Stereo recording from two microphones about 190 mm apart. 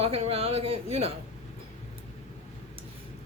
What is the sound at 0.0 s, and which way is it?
A woman's voice, 30° right (ahead or behind).